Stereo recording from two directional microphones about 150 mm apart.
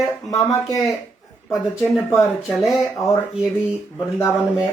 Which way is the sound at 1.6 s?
Centre (ahead or behind).